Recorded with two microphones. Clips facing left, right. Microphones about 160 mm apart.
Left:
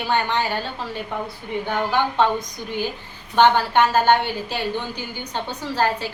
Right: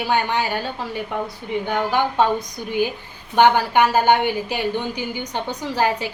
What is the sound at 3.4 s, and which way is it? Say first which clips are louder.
A woman's voice: right 1 dB; 10° right (ahead or behind).